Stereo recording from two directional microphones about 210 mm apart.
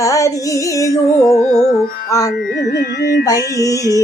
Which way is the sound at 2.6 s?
50° left (ahead or behind).